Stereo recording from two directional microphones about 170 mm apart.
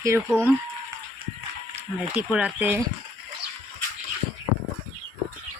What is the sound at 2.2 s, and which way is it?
Speech, 5° right (ahead or behind).